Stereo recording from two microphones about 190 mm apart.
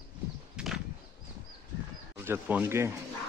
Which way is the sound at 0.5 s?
Centre (ahead or behind).